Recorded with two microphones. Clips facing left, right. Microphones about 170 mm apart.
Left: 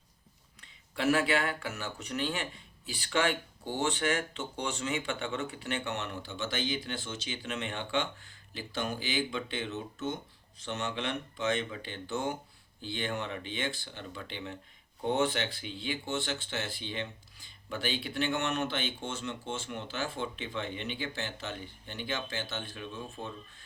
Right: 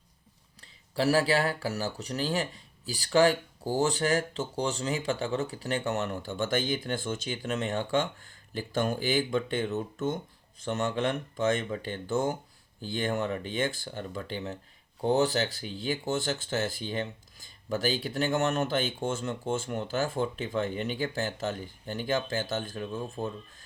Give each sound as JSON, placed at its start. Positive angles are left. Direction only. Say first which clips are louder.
{"t": 0.6, "sound": "speech", "louder": "right 3 dB", "side_deg": -35}